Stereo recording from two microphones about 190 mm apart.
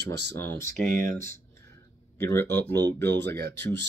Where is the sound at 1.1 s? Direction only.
15° left (ahead or behind).